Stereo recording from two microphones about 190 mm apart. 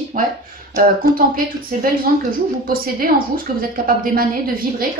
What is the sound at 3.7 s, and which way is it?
Speech, 50° right (ahead or behind).